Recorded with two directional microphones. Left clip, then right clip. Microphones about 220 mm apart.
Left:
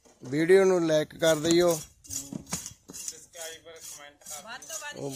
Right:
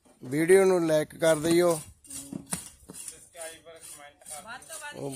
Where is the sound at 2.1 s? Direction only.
50° left (ahead or behind).